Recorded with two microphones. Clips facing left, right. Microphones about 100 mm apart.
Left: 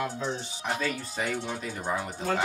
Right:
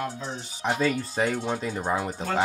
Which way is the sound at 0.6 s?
30° right (ahead or behind).